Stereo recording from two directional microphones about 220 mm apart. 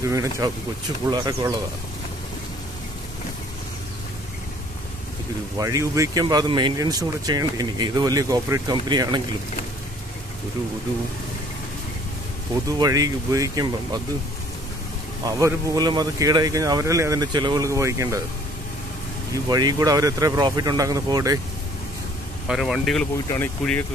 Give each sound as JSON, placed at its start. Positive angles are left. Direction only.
{"t": 0.0, "sound": "speech", "side_deg": -15}
{"t": 5.6, "sound": "speech", "side_deg": -15}
{"t": 12.7, "sound": "speech", "side_deg": -15}
{"t": 15.2, "sound": "speech", "side_deg": -15}
{"t": 19.3, "sound": "speech", "side_deg": -15}
{"t": 22.5, "sound": "speech", "side_deg": 0}
{"t": 23.1, "sound": "speech", "side_deg": 15}